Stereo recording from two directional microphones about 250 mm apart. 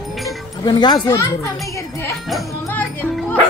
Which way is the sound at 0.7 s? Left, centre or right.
Centre.